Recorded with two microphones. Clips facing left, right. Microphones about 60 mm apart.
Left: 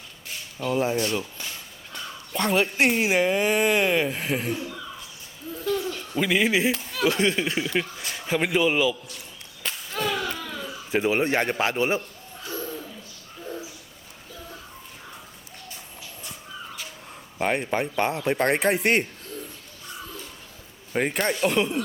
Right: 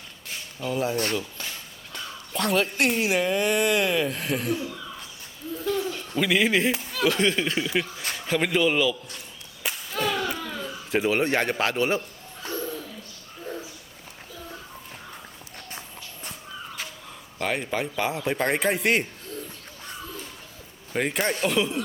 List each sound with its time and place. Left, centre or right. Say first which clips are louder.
0.7 s speech: left 2 dB; left
1.9 s speech: left 1 dB; centre
3.2 s speech: left 2 dB; centre
4.5 s speech: right 1 dB; centre
5.5 s hoot: even; centre
6.9 s a man's voice: even; centre
9.9 s children playing: right 1 dB; centre
11.1 s speech: even; centre
12.5 s bird: right 1 dB; centre
17.3 s speech: left 3 dB; centre
21.1 s speech: left 1 dB; centre